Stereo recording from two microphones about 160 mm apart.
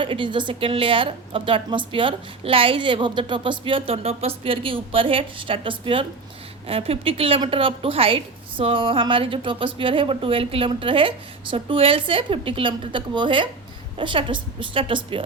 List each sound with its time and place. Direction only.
0.0 s a woman's voice: 30° right (ahead or behind)